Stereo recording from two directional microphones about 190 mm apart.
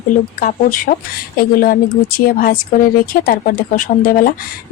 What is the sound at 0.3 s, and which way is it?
Speech, 45° left (ahead or behind).